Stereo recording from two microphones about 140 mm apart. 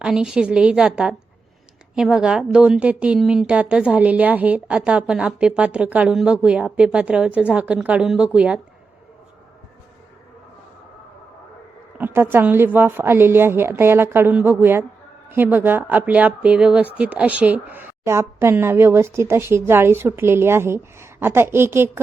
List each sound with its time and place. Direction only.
0.0 s speech: 5° right (ahead or behind)
11.9 s speech: 15° right (ahead or behind)